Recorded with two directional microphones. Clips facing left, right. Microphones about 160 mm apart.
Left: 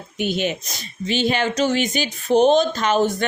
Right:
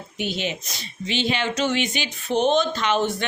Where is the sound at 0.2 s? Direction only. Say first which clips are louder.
Left 5 dB; 50° left (ahead or behind).